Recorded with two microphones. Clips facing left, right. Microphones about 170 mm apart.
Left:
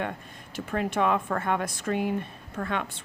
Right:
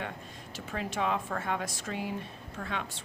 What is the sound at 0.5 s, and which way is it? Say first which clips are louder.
Speech: left 7 dB; 55° left (ahead or behind).